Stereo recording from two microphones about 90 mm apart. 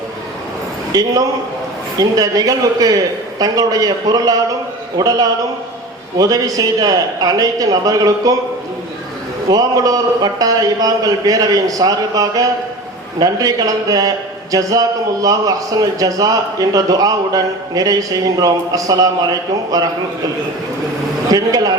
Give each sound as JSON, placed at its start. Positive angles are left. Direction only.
{"t": 0.9, "sound": "a man's voice", "side_deg": -45}
{"t": 9.5, "sound": "a man's voice", "side_deg": -45}
{"t": 21.2, "sound": "speech", "side_deg": -45}